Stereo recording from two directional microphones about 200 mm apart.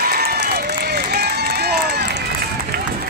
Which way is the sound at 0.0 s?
50° right (ahead or behind).